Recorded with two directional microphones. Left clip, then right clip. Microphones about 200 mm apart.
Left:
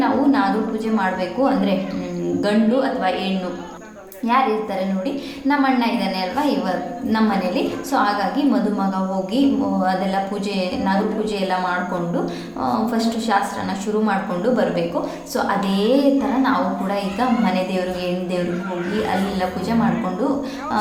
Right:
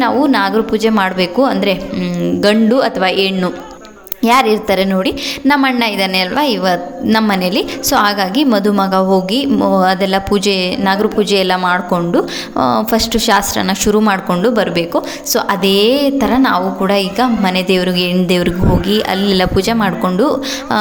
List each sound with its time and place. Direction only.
0.0 s a woman's voice: 50° right (ahead or behind)